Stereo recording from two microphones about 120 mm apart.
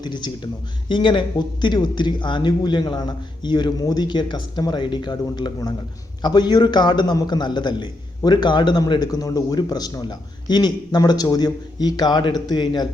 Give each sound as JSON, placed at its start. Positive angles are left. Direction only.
{"t": 0.0, "sound": "a man's voice", "side_deg": 35}